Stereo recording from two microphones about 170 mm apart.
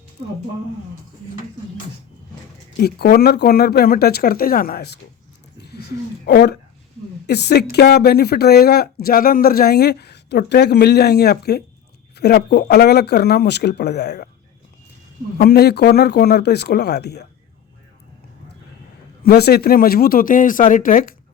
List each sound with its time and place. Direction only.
2.8 s speech: 65° left (ahead or behind)
5.7 s a sound: 75° left (ahead or behind)
7.3 s speech: 80° left
15.4 s speech: 70° left (ahead or behind)
19.2 s speech: 70° left (ahead or behind); by 21.2 s 55° left (ahead or behind)